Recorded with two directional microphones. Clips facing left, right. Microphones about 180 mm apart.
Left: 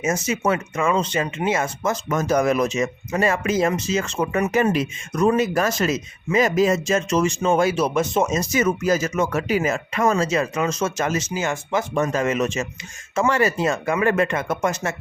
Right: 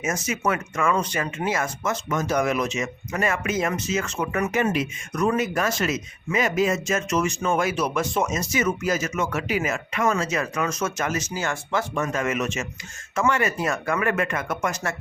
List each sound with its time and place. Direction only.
0.0 s speech: 25° left (ahead or behind)
2.0 s speech: 45° left (ahead or behind); by 4.5 s 25° left (ahead or behind)
4.5 s speech: 35° left (ahead or behind); by 11.9 s 20° left (ahead or behind)
11.9 s speech: 35° left (ahead or behind)